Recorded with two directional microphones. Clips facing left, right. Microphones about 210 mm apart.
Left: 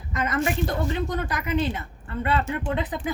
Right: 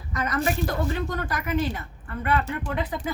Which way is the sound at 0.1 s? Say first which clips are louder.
Left 1 dB; 20° left (ahead or behind).